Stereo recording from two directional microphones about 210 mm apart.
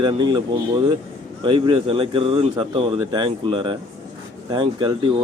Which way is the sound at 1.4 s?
25° right (ahead or behind).